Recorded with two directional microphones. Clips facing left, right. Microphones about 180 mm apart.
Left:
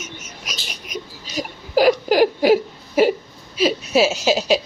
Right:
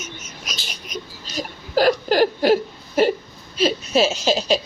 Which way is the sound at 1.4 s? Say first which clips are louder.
Left 2 dB; 10° left (ahead or behind).